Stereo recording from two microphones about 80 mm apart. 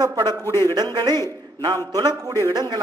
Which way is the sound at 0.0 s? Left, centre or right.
Right.